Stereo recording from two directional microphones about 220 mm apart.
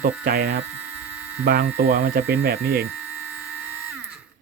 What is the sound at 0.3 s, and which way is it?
Speech, 45° right (ahead or behind).